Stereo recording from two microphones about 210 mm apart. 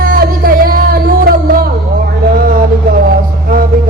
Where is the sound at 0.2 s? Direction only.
45° right (ahead or behind).